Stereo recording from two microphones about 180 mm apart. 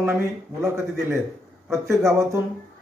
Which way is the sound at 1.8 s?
15° right (ahead or behind).